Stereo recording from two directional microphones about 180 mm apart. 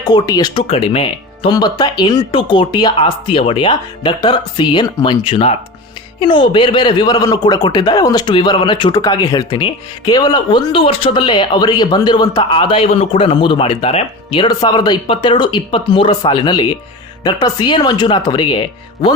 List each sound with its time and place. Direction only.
0.0 s speech: 20° left (ahead or behind)